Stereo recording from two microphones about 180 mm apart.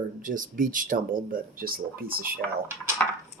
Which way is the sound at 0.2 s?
50° right (ahead or behind).